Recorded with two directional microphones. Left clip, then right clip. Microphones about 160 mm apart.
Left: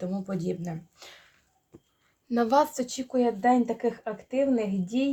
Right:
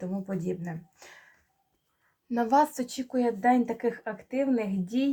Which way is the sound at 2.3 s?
30° left (ahead or behind).